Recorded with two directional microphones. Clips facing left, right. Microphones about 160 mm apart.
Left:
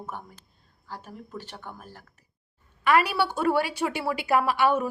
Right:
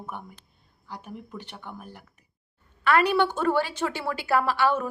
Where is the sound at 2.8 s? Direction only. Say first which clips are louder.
Right 1 dB; 10° left (ahead or behind).